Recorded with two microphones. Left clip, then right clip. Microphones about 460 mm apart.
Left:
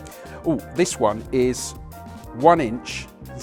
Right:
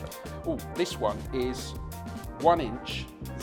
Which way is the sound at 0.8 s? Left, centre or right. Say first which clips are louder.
Left 9 dB; left.